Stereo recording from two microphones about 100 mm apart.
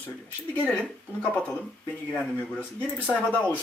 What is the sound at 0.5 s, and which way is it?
Speech, 10° left (ahead or behind).